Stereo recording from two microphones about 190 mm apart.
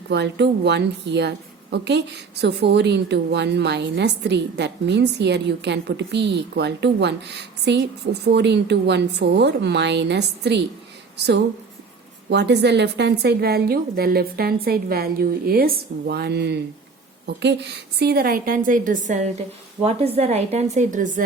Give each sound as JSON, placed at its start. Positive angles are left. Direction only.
{"t": 0.1, "sound": "a woman's voice", "side_deg": -65}
{"t": 12.3, "sound": "a woman's voice", "side_deg": -65}